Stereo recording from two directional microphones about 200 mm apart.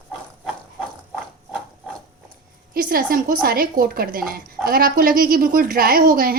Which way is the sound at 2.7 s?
45° right (ahead or behind).